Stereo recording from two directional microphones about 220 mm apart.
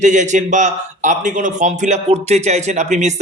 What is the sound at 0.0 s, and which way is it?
Speech, 35° right (ahead or behind).